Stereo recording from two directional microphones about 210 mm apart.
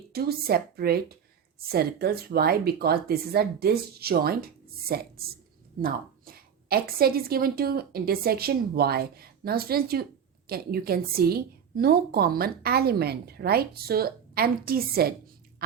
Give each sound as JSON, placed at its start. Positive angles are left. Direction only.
{"t": 0.1, "sound": "a woman's voice", "side_deg": -45}